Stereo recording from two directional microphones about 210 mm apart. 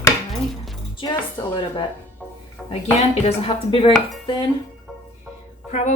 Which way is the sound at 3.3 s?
25° left (ahead or behind).